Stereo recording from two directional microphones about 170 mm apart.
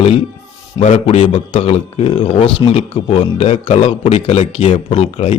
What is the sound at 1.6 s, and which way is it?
A man's voice, 35° left (ahead or behind).